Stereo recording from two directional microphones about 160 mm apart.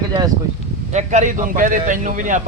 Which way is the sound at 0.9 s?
50° right (ahead or behind).